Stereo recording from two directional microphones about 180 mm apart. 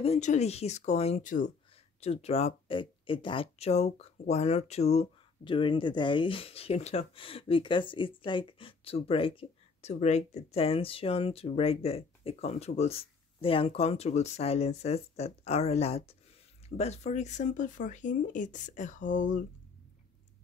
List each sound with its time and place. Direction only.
0.0 s speech: 40° left (ahead or behind)